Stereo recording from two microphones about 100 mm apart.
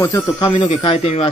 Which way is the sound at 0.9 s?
90° left.